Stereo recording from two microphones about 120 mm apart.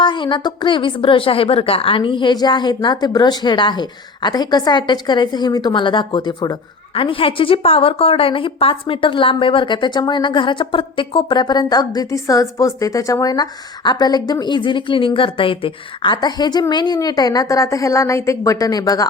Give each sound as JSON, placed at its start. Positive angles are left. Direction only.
{"t": 0.0, "sound": "a woman's voice", "side_deg": 40}
{"t": 16.1, "sound": "a woman's voice", "side_deg": 35}